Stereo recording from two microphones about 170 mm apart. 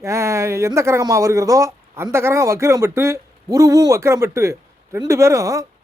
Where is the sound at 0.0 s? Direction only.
15° right (ahead or behind).